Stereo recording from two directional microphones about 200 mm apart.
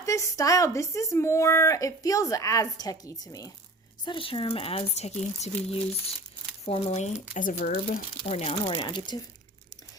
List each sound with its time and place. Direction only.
0.0 s a woman's voice: 15° left (ahead or behind); by 8.0 s 45° left (ahead or behind)
8.2 s speech: 30° left (ahead or behind)